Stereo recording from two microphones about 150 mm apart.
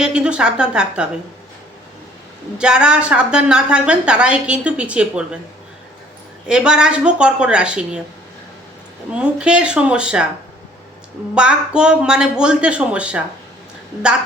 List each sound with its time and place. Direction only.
0.0 s a woman's voice: 5° right (ahead or behind)
2.6 s a woman's voice: 5° right (ahead or behind)
6.5 s a woman's voice: 5° right (ahead or behind)
9.1 s a woman's voice: 5° right (ahead or behind)
11.3 s a woman's voice: 5° right (ahead or behind)